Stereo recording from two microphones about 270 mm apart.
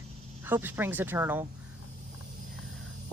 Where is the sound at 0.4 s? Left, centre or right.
Centre.